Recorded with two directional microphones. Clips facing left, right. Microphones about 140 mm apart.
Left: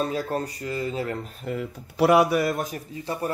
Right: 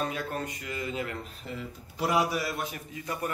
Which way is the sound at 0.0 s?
35° left (ahead or behind).